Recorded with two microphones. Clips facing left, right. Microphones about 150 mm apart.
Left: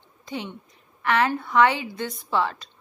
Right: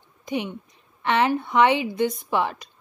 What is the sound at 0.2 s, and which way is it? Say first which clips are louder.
A woman's voice: right 5 dB; 15° right (ahead or behind).